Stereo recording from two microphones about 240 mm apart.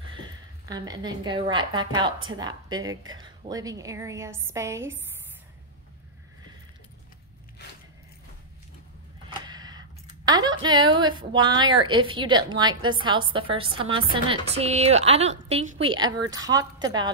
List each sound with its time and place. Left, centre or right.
0.7 s a woman's voice: centre
9.5 s a woman's voice: centre
16.2 s speech: right
16.4 s a woman's voice: centre